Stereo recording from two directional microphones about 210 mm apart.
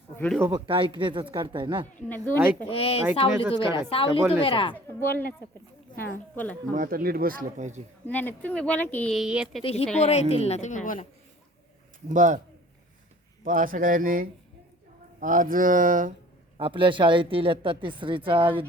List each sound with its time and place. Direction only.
0.3 s speech: 10° right (ahead or behind)
0.7 s speech: 25° right (ahead or behind)
2.0 s speech: 10° left (ahead or behind)
2.6 s speech: 25° left (ahead or behind)
4.7 s speech: 10° left (ahead or behind)
6.7 s speech: 45° right (ahead or behind)
8.0 s speech: 10° left (ahead or behind)
9.9 s a woman's voice: 30° left (ahead or behind)
12.1 s speech: 35° right (ahead or behind)
13.4 s speech: 40° right (ahead or behind)
16.6 s speech: 25° right (ahead or behind)